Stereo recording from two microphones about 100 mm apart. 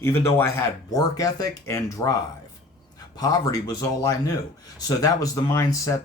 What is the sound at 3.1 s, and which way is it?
Speech, 35° left (ahead or behind).